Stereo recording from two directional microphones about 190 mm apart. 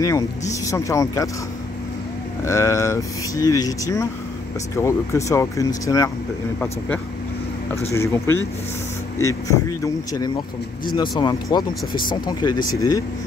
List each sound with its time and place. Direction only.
0.7 s speech: 15° left (ahead or behind)
2.4 s speech: 15° left (ahead or behind)
7.9 s speech: 15° left (ahead or behind)